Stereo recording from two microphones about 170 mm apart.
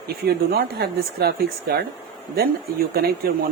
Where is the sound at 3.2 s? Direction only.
60° right (ahead or behind).